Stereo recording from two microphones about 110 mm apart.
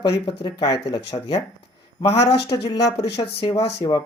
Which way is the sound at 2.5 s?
55° left (ahead or behind).